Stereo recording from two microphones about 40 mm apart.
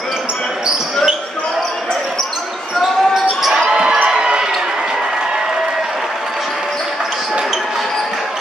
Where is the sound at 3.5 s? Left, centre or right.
Right.